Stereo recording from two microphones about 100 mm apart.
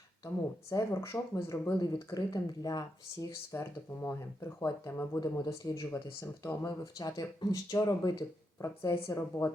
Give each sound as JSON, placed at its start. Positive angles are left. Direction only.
{"t": 0.7, "sound": "speech", "side_deg": 30}
{"t": 1.8, "sound": "speech", "side_deg": 40}
{"t": 5.2, "sound": "speech", "side_deg": 40}
{"t": 6.7, "sound": "speech", "side_deg": 40}